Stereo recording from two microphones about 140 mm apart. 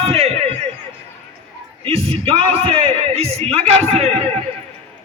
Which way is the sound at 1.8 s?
45° right (ahead or behind).